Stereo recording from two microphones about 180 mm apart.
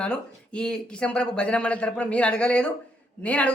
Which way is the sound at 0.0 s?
5° left (ahead or behind).